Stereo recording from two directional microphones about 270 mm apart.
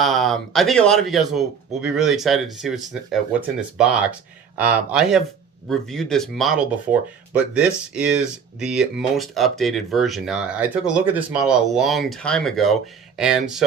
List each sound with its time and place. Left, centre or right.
0.0 s speech: centre